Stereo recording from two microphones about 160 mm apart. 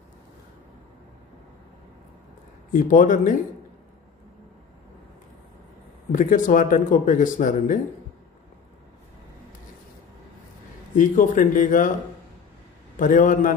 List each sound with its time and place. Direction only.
2.7 s speech: 55° left (ahead or behind)
6.1 s speech: 55° left (ahead or behind)
11.0 s speech: 55° left (ahead or behind)
13.0 s speech: 55° left (ahead or behind)